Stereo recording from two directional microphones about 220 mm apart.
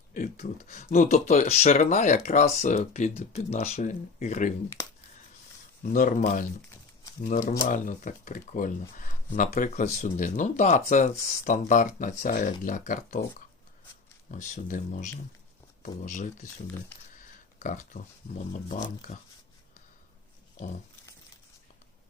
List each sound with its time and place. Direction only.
0.1 s speech: 35° left (ahead or behind)
5.8 s speech: 35° left (ahead or behind)
14.3 s speech: 35° left (ahead or behind)
17.6 s speech: 35° left (ahead or behind)